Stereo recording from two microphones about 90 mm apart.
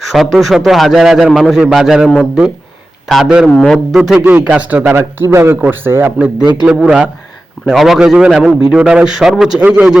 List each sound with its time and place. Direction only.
0.0 s a man's voice: centre (ahead or behind)
3.1 s a man's voice: 5° right (ahead or behind)
3.5 s speech: 10° left (ahead or behind)
3.9 s a man's voice: 5° right (ahead or behind)
4.2 s speech: 30° right (ahead or behind)
4.4 s speech: 15° right (ahead or behind)
6.4 s a man's voice: 50° right (ahead or behind)
6.7 s a man's voice: 10° right (ahead or behind)